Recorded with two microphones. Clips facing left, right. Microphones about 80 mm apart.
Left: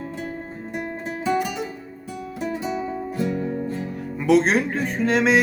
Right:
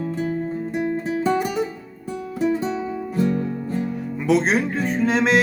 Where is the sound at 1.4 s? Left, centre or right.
Right.